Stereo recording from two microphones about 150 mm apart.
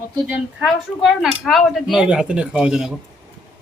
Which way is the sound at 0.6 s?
Centre (ahead or behind).